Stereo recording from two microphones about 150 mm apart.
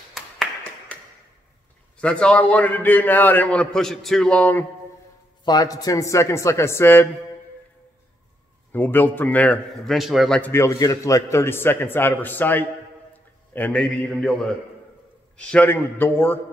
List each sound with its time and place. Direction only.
0.1 s clapping: 5° left (ahead or behind)
2.0 s a man's voice: 5° left (ahead or behind)
5.4 s speech: 25° left (ahead or behind)
8.7 s a man's voice: 15° left (ahead or behind)
9.9 s a man's voice: centre (ahead or behind)
10.5 s a man's voice: 20° left (ahead or behind)